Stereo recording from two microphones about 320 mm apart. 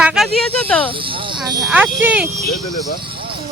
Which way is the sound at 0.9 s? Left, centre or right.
Centre.